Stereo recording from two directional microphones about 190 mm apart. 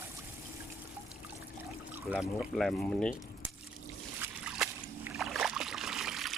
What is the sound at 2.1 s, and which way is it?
Speech, centre (ahead or behind).